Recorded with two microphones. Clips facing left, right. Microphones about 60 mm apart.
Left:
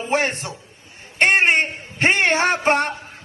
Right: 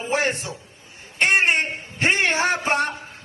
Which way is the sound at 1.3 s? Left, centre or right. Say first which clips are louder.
Left 2 dB; left.